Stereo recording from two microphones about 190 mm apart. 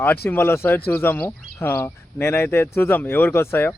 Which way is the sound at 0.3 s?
10° left (ahead or behind).